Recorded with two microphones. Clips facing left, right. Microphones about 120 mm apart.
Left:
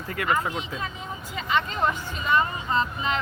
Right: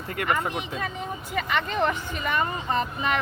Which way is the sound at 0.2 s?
55° right (ahead or behind).